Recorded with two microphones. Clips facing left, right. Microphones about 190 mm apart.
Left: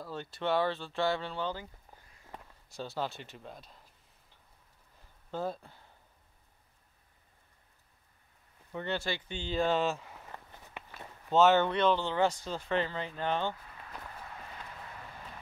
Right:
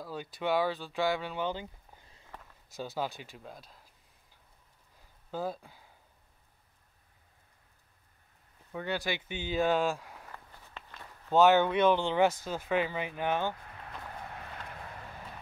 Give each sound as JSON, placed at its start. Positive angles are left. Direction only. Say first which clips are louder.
{"t": 0.0, "sound": "speech", "louder": "right 1 dB", "side_deg": -10}
{"t": 5.3, "sound": "speech", "louder": "even", "side_deg": -5}
{"t": 8.7, "sound": "speech", "louder": "right 1 dB", "side_deg": -10}
{"t": 10.3, "sound": "walk", "louder": "left 2 dB", "side_deg": 20}
{"t": 11.3, "sound": "speech", "louder": "right 1 dB", "side_deg": -15}